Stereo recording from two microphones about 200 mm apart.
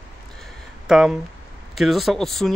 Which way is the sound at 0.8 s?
Centre (ahead or behind).